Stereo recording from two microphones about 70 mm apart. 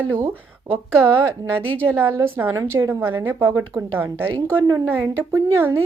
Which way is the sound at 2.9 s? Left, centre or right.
Right.